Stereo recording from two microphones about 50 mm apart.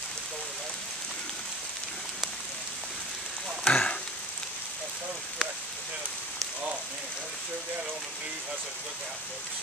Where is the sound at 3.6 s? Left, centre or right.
Left.